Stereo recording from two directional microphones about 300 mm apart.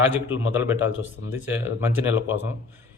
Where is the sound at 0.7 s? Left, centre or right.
Left.